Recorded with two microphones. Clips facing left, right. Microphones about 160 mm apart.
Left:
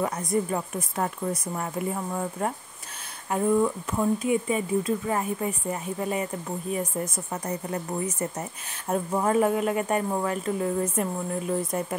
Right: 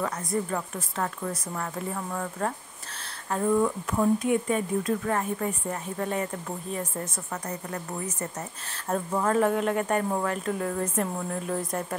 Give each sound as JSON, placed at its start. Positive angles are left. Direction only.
{"t": 0.0, "sound": "speech", "side_deg": 15}